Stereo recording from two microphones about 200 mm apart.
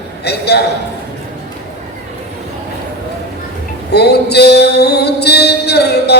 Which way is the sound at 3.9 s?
55° left (ahead or behind).